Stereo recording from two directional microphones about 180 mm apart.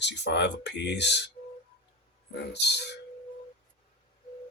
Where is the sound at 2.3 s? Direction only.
70° left (ahead or behind).